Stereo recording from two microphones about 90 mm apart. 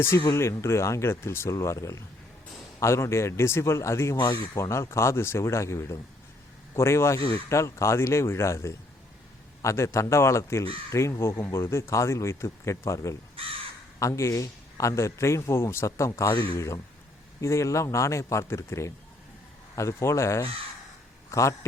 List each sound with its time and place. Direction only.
0.3 s a man's voice: 30° left (ahead or behind)